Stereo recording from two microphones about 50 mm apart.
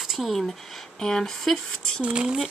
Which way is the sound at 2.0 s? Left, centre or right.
Centre.